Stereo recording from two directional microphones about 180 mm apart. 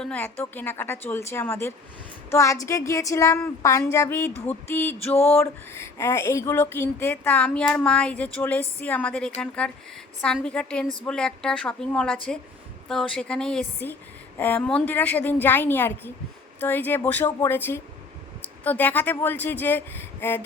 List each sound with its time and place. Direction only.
0.0 s speech: 5° left (ahead or behind)
5.1 s a sound: 35° left (ahead or behind)
5.4 s a woman's voice: 15° left (ahead or behind)